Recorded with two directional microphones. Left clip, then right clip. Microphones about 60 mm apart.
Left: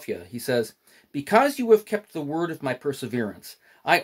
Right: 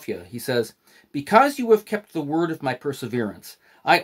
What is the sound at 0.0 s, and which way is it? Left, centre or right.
Speech, right.